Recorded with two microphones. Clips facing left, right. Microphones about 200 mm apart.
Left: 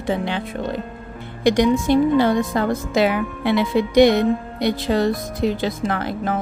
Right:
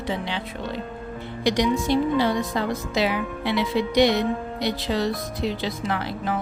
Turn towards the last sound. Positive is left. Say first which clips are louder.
# left 4 dB
turn(degrees=50)  # may be behind; listen again after turning